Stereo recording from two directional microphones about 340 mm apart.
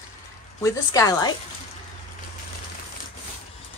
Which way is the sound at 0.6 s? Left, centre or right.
Centre.